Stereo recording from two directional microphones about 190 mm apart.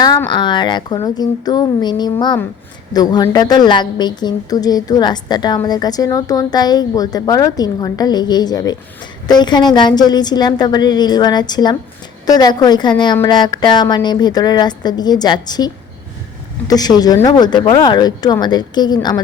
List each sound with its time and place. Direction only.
0.3 s a woman's voice: 25° left (ahead or behind)